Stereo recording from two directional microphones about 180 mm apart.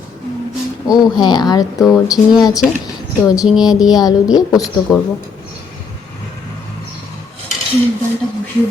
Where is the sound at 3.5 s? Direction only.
5° right (ahead or behind).